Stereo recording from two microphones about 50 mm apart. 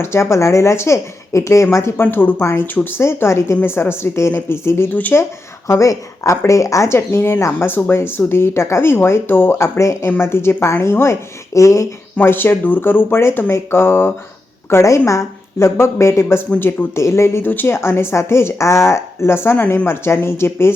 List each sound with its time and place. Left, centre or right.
0.0 s speech: left
2.0 s speech: left
2.4 s a woman's voice: left
3.6 s a woman's voice: left
5.6 s speech: left
9.6 s speech: left
10.2 s a woman's voice: left
12.2 s speech: left
14.7 s speech: left
16.6 s speech: left
17.0 s speech: left
17.4 s speech: left
17.7 s a woman's voice: left